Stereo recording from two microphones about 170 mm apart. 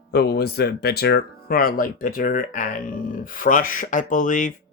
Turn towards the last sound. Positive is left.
turn(degrees=50)  # may be behind; listen again after turning